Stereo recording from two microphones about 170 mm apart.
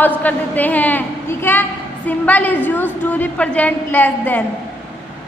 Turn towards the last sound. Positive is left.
turn(degrees=10)  # may be behind; listen again after turning